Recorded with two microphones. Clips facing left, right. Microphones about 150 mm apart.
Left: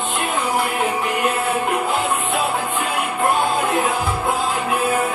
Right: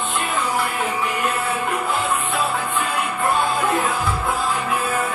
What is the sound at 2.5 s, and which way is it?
Music, 45° left (ahead or behind).